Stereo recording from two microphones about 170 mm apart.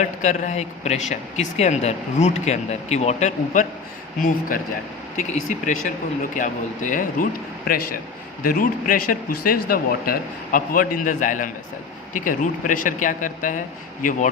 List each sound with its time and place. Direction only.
0.0 s speech: 45° left (ahead or behind)
8.4 s speech: 55° left (ahead or behind)